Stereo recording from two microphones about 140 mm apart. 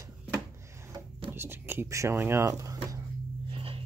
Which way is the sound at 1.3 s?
15° right (ahead or behind).